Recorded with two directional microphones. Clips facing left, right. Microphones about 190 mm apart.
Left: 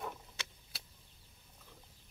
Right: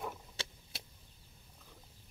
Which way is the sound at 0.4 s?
30° right (ahead or behind).